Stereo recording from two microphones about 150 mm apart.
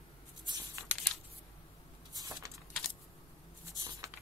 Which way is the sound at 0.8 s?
Centre (ahead or behind).